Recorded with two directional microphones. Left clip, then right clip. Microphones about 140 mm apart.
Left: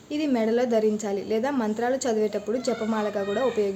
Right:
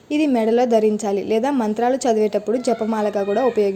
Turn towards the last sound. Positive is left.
turn(degrees=-40)  # may be behind; listen again after turning